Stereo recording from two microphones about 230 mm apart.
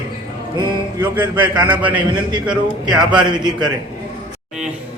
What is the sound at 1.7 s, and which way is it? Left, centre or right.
Speech, centre.